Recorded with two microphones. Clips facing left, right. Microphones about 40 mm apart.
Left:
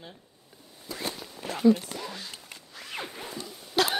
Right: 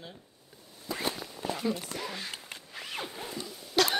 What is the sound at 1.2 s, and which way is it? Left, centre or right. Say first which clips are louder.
Zipper: left 9 dB; right.